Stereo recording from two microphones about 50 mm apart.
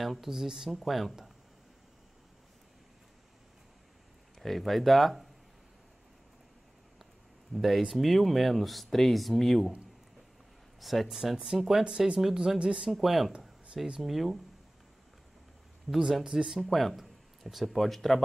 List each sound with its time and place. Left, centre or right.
0.0 s speech: centre
4.4 s speech: centre
7.5 s speech: centre
10.8 s speech: centre
12.5 s speech: centre
12.9 s speech: centre
16.0 s speech: centre